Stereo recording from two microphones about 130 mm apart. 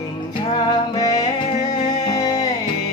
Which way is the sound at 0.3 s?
35° left (ahead or behind).